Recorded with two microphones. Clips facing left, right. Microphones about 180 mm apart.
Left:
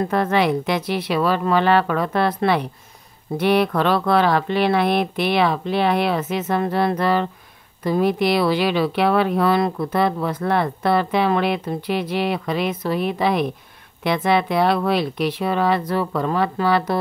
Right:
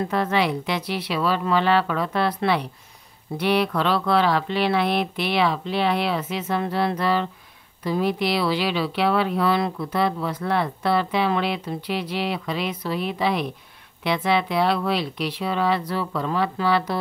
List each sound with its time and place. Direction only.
0.0 s speech: 50° left (ahead or behind)